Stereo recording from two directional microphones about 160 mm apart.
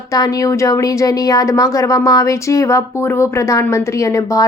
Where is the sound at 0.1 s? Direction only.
20° left (ahead or behind).